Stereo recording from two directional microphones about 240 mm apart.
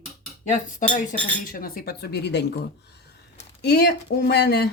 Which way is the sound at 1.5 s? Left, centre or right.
Left.